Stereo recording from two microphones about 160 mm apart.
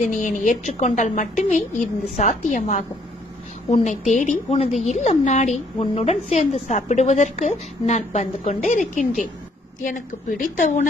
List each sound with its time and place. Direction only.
0.1 s a woman's voice: 55° left (ahead or behind)
9.8 s a woman's voice: 55° left (ahead or behind)